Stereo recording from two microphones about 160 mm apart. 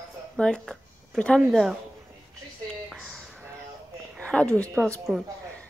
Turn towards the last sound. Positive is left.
turn(degrees=0)  # may be behind; listen again after turning